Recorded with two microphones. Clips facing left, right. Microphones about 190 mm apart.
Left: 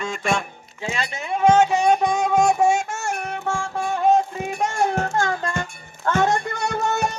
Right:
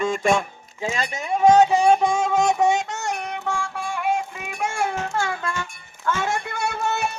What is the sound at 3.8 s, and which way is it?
Music, 30° left (ahead or behind).